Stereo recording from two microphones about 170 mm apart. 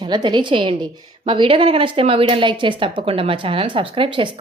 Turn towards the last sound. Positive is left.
turn(degrees=-30)  # may be behind; listen again after turning